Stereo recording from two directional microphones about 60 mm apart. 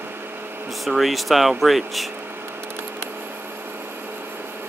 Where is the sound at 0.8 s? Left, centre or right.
Centre.